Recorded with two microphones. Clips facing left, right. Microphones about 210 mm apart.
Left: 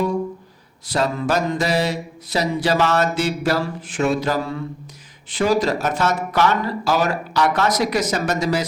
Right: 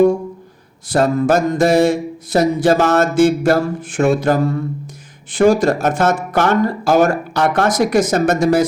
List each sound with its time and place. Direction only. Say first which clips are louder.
0.9 s mantra: right 7 dB; 50° right (ahead or behind)